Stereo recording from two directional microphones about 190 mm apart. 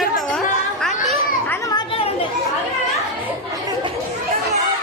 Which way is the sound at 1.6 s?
25° left (ahead or behind).